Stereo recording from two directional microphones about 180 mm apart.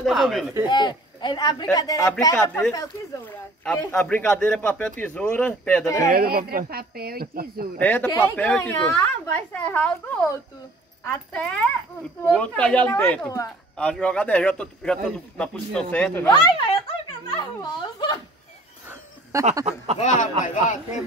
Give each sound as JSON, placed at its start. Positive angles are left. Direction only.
{"t": 0.0, "sound": "a man's voice", "side_deg": 0}
{"t": 0.7, "sound": "speech", "side_deg": 25}
{"t": 2.3, "sound": "a man's voice", "side_deg": 10}
{"t": 6.0, "sound": "speech", "side_deg": -55}
{"t": 7.8, "sound": "a man's voice", "side_deg": 10}
{"t": 16.3, "sound": "speech", "side_deg": 25}
{"t": 19.3, "sound": "a sound", "side_deg": -15}
{"t": 20.0, "sound": "a man's voice", "side_deg": 45}